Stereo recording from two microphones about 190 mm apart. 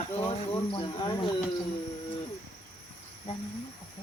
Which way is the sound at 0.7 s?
25° left (ahead or behind).